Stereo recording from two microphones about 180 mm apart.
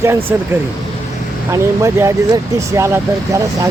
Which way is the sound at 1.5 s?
15° right (ahead or behind).